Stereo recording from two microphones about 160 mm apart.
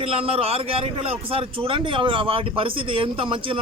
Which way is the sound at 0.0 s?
40° right (ahead or behind).